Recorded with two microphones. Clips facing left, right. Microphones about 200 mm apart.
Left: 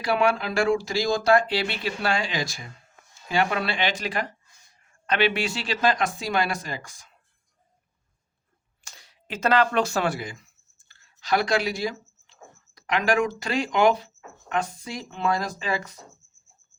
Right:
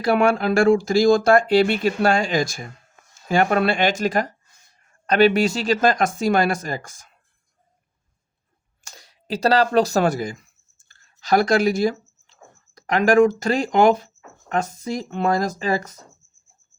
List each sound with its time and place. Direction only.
0.0 s speech: 50° right (ahead or behind)
8.8 s a sound: 40° right (ahead or behind)
12.7 s speech: 45° right (ahead or behind)